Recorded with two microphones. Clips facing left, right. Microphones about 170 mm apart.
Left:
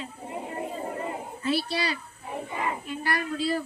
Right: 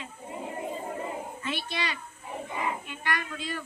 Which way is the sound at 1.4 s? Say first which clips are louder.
Left 8 dB; 35° left (ahead or behind).